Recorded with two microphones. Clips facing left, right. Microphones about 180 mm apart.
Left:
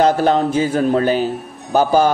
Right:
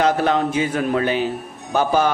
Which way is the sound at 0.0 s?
35° left (ahead or behind).